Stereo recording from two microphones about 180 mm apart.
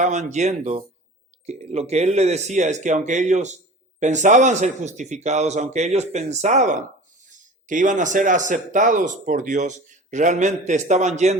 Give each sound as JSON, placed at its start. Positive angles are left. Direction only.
{"t": 0.0, "sound": "a man's voice", "side_deg": -40}